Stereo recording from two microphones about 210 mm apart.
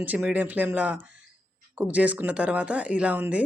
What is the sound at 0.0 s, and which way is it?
Speech, 5° right (ahead or behind).